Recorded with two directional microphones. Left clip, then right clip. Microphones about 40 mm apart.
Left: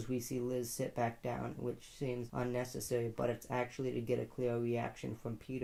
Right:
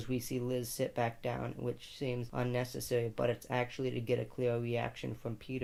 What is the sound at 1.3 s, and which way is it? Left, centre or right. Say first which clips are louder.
Speech: right 2 dB; left.